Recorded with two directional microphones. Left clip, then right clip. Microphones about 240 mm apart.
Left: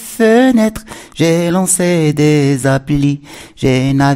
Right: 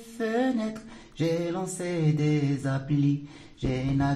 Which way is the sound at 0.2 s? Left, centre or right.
Left.